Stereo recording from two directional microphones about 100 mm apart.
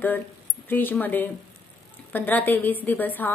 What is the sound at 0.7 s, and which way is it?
A woman's voice, 20° left (ahead or behind).